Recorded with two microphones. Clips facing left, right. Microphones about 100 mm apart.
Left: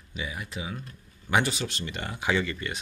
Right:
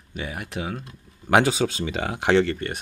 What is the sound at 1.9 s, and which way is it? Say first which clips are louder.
Speech: right 7 dB; 90° right.